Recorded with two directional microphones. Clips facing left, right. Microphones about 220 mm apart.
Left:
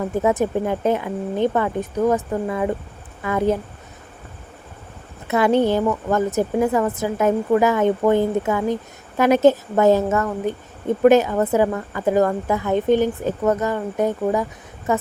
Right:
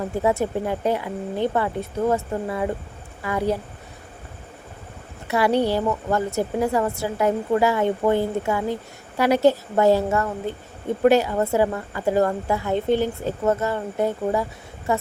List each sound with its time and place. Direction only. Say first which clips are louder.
0.1 s speech: left 2 dB; 20° left (ahead or behind)
5.3 s speech: left 3 dB; 20° left (ahead or behind)